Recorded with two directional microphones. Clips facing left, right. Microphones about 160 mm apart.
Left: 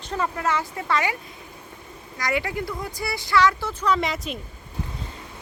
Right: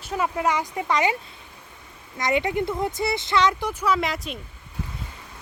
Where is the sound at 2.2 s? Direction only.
20° right (ahead or behind); by 4.4 s centre (ahead or behind).